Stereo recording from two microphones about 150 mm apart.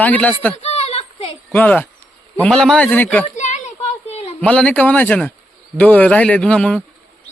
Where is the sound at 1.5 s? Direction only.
10° left (ahead or behind).